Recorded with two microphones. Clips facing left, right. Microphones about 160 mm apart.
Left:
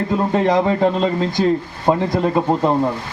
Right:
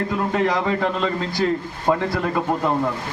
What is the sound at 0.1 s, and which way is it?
A man's voice, 25° left (ahead or behind).